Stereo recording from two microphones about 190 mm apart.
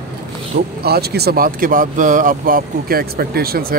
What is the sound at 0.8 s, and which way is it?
Speech, 55° right (ahead or behind).